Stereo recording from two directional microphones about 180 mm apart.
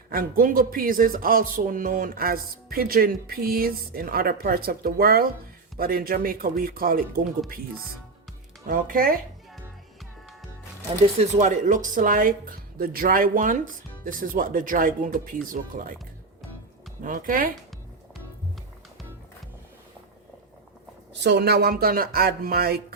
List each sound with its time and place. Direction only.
0.1 s speech: 55° right (ahead or behind)
8.6 s speech: 50° right (ahead or behind)
11.2 s speech: 40° right (ahead or behind)
17.0 s speech: 45° right (ahead or behind)
21.1 s speech: 70° right (ahead or behind)